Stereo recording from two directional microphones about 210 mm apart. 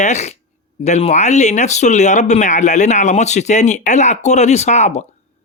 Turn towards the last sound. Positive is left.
turn(degrees=35)  # may be behind; listen again after turning